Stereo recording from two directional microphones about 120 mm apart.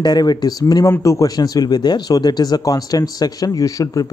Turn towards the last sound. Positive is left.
turn(degrees=30)  # may be behind; listen again after turning